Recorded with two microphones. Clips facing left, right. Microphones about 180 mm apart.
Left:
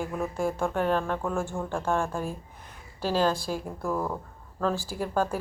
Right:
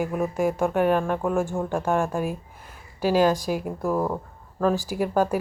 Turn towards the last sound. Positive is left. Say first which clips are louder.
# right 5 dB
turn(degrees=-15)  # may be behind; listen again after turning